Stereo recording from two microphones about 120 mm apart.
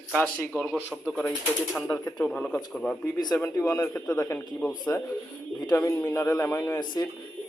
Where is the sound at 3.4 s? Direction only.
25° left (ahead or behind).